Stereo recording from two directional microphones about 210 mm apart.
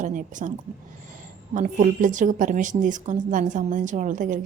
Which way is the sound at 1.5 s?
35° right (ahead or behind).